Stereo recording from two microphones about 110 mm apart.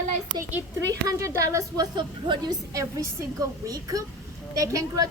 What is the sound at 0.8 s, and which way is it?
A woman's voice, 30° right (ahead or behind).